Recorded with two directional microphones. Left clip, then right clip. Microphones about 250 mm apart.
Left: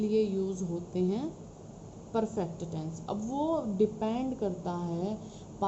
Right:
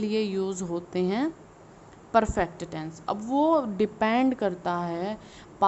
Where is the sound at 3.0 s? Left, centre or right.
Right.